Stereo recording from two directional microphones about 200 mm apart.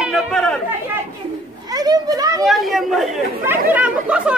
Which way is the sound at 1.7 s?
20° right (ahead or behind).